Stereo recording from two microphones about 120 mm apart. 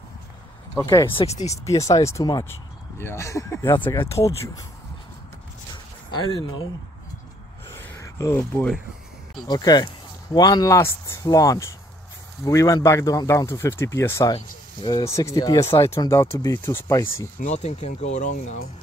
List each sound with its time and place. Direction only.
0.7 s speech: 25° left (ahead or behind)
1.3 s speech: 65° left (ahead or behind)
1.6 s speech: 25° left (ahead or behind)
7.7 s a sound: 20° left (ahead or behind)
9.5 s speech: 35° left (ahead or behind)
14.3 s speech: 40° left (ahead or behind)
15.0 s speech: 25° left (ahead or behind)
17.5 s speech: 65° left (ahead or behind)